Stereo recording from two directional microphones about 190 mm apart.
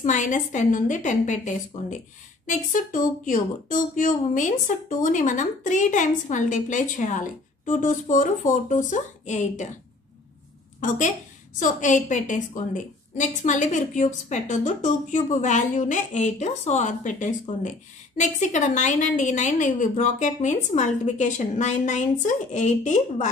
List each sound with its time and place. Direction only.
0.0 s a woman's voice: 40° left (ahead or behind)
11.6 s a woman's voice: 40° left (ahead or behind)